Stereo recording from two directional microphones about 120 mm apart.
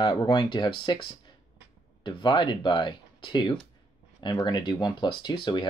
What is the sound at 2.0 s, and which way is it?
Speech, 40° left (ahead or behind).